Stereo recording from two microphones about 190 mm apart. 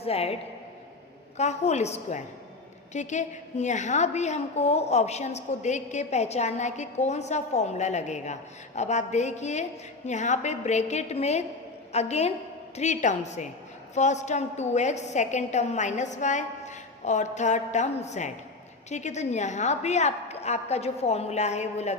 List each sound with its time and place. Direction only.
0.0 s a woman's voice: 30° left (ahead or behind)
1.4 s a woman's voice: 35° left (ahead or behind)